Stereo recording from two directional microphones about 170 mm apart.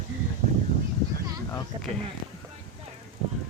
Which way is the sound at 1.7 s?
30° right (ahead or behind).